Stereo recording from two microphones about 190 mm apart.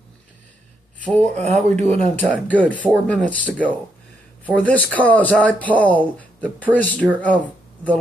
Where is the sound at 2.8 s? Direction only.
5° left (ahead or behind).